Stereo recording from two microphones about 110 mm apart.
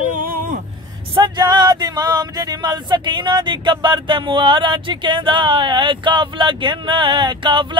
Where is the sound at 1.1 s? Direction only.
45° right (ahead or behind).